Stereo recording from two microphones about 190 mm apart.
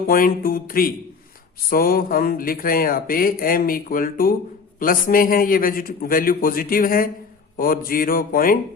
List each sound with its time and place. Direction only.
0.1 s speech: 50° left (ahead or behind)